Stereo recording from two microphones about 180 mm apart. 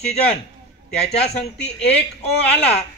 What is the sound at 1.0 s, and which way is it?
Speech, 35° left (ahead or behind).